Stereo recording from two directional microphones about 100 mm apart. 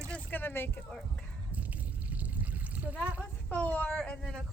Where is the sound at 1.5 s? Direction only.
15° right (ahead or behind).